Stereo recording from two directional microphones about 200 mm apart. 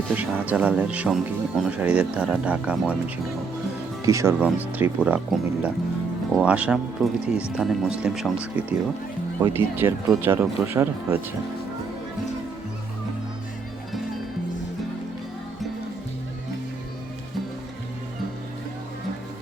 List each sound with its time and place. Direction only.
0.1 s speech: 10° right (ahead or behind)
4.0 s speech: 15° right (ahead or behind)